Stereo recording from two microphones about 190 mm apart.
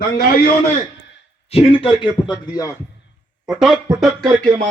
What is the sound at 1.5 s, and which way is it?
Speech, 30° left (ahead or behind).